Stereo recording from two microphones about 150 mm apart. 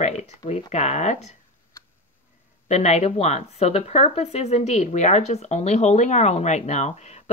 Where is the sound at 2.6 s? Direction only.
45° left (ahead or behind).